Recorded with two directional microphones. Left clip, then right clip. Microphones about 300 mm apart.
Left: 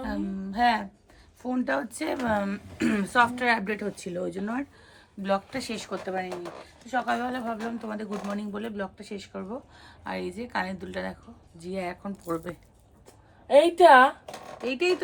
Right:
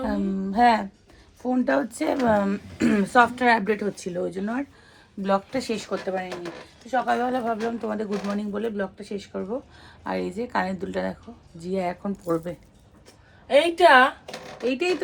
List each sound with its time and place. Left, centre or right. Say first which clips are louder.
0.0 s a sound: right 6 dB; centre
1.4 s speech: right 5 dB; centre
13.5 s a woman's voice: even; centre
14.6 s speech: right 2 dB; centre